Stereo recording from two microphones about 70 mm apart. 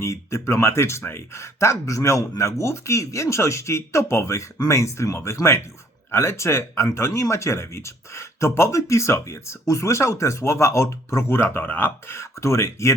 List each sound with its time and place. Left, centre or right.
0.0 s speech: left
12.0 s speech: left